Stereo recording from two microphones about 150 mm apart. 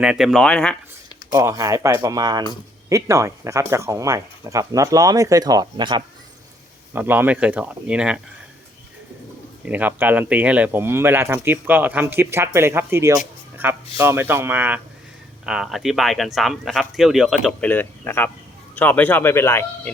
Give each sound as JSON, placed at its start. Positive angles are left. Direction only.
{"t": 0.0, "sound": "speech", "side_deg": -5}
{"t": 1.3, "sound": "speech", "side_deg": -20}
{"t": 6.9, "sound": "speech", "side_deg": -15}
{"t": 9.6, "sound": "speech", "side_deg": -10}
{"t": 17.6, "sound": "speech", "side_deg": 10}